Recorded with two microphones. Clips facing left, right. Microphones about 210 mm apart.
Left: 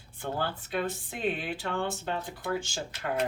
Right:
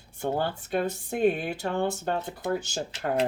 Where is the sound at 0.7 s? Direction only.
45° right (ahead or behind).